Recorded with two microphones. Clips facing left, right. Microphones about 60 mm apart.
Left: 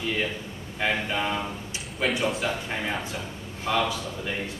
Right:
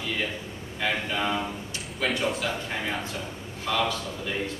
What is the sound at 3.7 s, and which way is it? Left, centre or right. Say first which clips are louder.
Speech: left 2 dB; centre.